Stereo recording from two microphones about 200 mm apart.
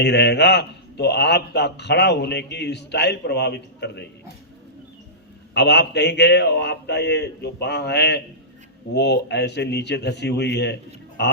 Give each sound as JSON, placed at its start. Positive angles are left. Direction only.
{"t": 0.0, "sound": "a man's voice", "side_deg": 55}
{"t": 5.5, "sound": "a man's voice", "side_deg": 60}